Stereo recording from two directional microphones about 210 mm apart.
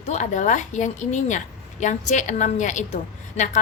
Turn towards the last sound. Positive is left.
turn(degrees=35)  # may be behind; listen again after turning